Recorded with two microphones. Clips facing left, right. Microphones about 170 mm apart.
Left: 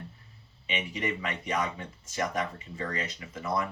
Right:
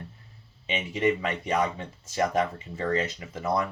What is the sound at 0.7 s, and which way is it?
Speech, 30° right (ahead or behind).